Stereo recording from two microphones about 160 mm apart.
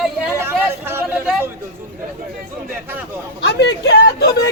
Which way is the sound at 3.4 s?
90° left.